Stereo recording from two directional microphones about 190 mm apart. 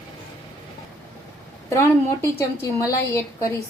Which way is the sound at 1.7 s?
15° left (ahead or behind).